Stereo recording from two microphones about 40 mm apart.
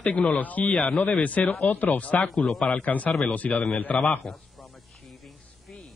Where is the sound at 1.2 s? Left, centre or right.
Left.